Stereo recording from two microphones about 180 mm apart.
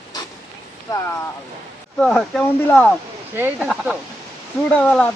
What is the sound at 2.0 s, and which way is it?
Speech, 5° left (ahead or behind).